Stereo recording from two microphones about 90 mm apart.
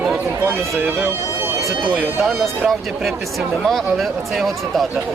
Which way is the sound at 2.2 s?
5° right (ahead or behind).